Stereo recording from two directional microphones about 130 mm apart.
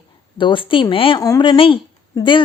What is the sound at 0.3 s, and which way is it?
Speech, 40° left (ahead or behind).